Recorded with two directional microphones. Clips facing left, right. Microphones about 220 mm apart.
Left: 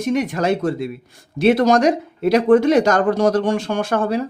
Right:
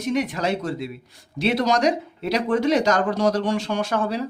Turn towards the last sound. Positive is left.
turn(degrees=50)  # may be behind; listen again after turning